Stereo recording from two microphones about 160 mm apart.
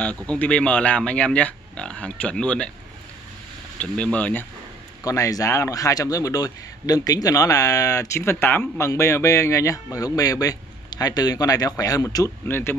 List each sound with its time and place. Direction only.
0.0 s speech: 10° left (ahead or behind)
3.8 s speech: 5° left (ahead or behind)
5.0 s speech: 20° left (ahead or behind)